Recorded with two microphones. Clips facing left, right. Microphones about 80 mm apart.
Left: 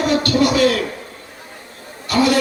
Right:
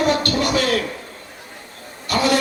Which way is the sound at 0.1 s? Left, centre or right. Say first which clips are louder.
Left 3 dB; right.